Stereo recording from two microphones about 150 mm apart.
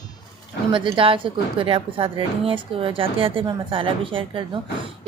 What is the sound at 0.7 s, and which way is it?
A woman's voice, 35° right (ahead or behind).